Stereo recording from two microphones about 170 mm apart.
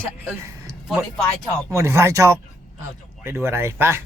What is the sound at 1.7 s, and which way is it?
Speech, 15° right (ahead or behind).